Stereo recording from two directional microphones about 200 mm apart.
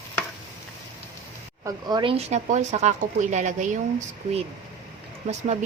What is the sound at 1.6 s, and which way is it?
Speech, 20° right (ahead or behind).